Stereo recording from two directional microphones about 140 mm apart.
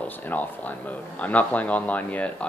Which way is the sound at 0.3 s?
10° left (ahead or behind).